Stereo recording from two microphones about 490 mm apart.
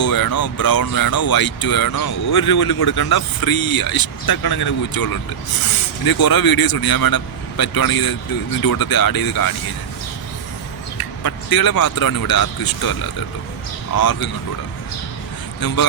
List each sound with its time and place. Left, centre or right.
0.0 s speech: left
10.9 s speech: left
13.9 s speech: left
15.6 s speech: left